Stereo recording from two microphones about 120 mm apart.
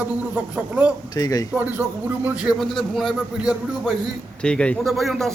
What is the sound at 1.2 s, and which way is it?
Speech, 30° left (ahead or behind).